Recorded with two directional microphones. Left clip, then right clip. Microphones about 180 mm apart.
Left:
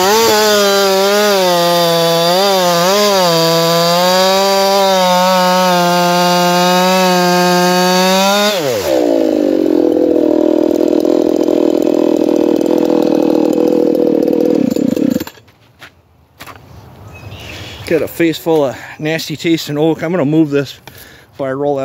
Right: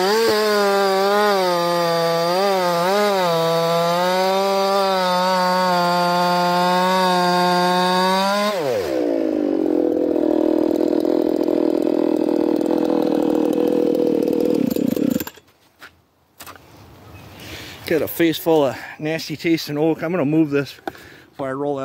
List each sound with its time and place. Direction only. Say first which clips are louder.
0.2 s chainsaw: left 7 dB; centre (ahead or behind)
10.1 s vehicle: left 7 dB; 20° right (ahead or behind); by 15.2 s 65° right (ahead or behind)
17.6 s a sound: left 6 dB; 65° right (ahead or behind); by 18.8 s 45° right (ahead or behind)
19.0 s speech: left 6 dB; 10° right (ahead or behind)
21.4 s speech: left 8 dB; centre (ahead or behind)